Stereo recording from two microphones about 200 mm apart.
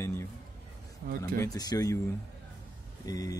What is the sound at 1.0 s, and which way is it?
Speech, 45° right (ahead or behind).